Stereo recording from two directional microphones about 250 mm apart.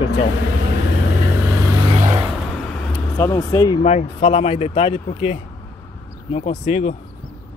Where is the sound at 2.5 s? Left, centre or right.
Centre; by 6.9 s left.